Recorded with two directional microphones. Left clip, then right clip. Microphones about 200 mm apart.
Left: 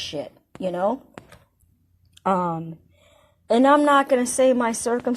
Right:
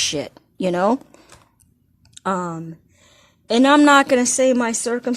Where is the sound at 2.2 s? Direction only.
20° right (ahead or behind).